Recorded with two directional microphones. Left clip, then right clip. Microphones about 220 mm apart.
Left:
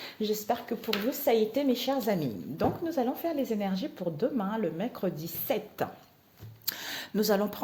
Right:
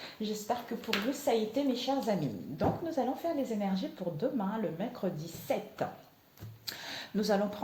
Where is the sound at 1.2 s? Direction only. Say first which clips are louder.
Left 6 dB; 55° left (ahead or behind).